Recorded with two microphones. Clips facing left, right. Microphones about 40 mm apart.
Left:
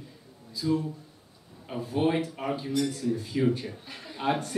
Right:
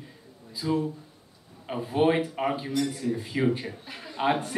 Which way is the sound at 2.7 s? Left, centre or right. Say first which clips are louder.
Even; centre.